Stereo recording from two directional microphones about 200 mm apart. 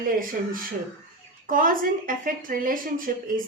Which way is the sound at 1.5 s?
45° right (ahead or behind).